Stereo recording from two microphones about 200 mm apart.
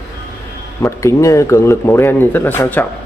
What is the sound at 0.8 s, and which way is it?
Speech, 15° left (ahead or behind).